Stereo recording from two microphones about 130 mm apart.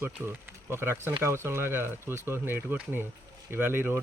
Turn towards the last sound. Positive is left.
turn(degrees=-15)  # may be behind; listen again after turning